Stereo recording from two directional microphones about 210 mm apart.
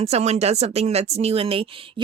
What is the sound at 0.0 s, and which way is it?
Speech, 30° right (ahead or behind).